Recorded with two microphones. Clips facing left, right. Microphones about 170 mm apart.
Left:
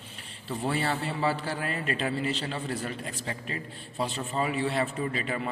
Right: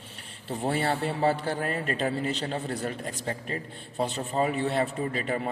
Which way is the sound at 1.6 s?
45° right (ahead or behind).